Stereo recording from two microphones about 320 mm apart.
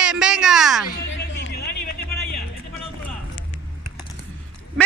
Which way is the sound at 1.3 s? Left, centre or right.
Left.